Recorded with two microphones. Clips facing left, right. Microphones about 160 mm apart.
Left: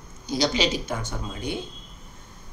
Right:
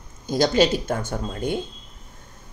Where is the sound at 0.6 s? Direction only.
50° right (ahead or behind).